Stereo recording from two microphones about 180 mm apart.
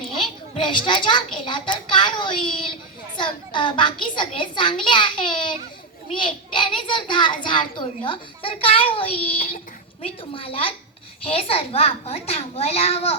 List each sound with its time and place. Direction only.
0.0 s children playing: 30° left (ahead or behind)
1.5 s a child's voice: 25° left (ahead or behind)